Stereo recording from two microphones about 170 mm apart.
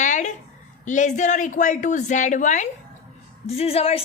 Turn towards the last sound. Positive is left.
turn(degrees=35)  # may be behind; listen again after turning